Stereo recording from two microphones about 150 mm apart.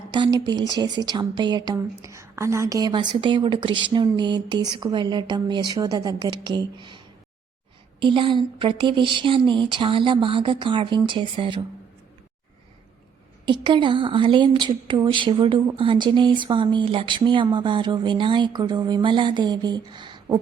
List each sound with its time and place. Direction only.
0.1 s a woman's voice: 25° right (ahead or behind)
13.4 s speech: 30° right (ahead or behind)